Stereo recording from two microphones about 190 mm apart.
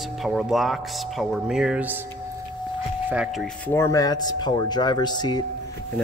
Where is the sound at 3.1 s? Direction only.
5° right (ahead or behind); by 5.4 s 20° left (ahead or behind).